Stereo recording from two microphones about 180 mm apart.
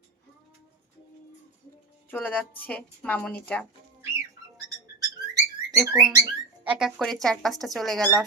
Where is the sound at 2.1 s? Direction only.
10° left (ahead or behind).